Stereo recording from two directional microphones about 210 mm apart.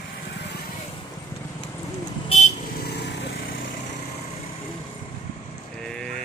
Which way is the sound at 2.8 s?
55° left (ahead or behind).